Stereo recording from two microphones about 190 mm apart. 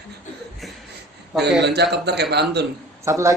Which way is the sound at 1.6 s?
65° right (ahead or behind).